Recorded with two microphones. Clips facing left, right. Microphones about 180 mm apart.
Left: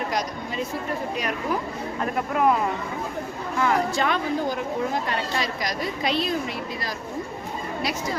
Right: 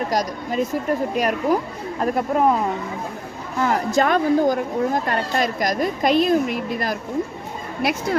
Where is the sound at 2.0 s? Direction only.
35° right (ahead or behind).